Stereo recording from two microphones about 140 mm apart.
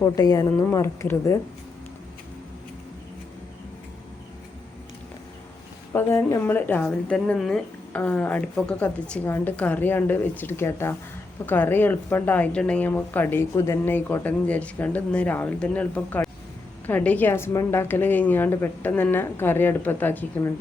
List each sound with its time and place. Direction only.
0.0 s a woman's voice: 25° left (ahead or behind)
5.9 s a woman's voice: 15° left (ahead or behind)